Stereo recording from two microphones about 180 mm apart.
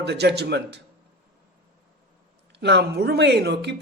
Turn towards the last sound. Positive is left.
turn(degrees=-70)  # may be behind; listen again after turning